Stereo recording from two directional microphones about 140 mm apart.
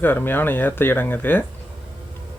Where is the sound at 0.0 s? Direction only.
15° left (ahead or behind).